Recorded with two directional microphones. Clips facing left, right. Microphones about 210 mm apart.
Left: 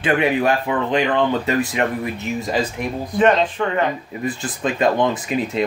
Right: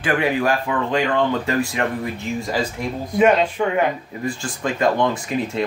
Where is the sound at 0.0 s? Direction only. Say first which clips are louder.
Left 2 dB; 25° left (ahead or behind).